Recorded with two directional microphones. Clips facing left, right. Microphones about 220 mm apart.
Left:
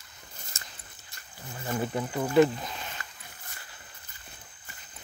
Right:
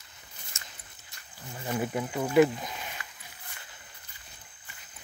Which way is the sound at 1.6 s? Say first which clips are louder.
Even; 10° right (ahead or behind).